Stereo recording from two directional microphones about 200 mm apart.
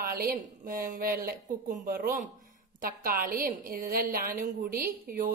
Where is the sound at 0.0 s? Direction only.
45° right (ahead or behind).